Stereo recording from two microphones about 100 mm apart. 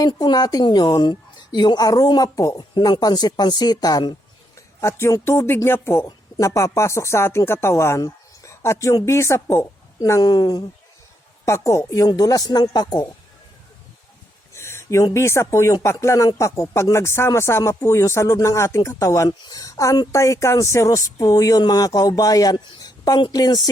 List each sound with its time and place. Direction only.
0.0 s speech: 45° left (ahead or behind)
4.5 s a sound: 25° left (ahead or behind)
5.2 s speech: 25° left (ahead or behind)
10.1 s speech: 40° left (ahead or behind)
11.4 s speech: 30° left (ahead or behind)
12.0 s speech: 40° left (ahead or behind)
14.5 s a sound: 25° left (ahead or behind)
15.1 s speech: 30° left (ahead or behind)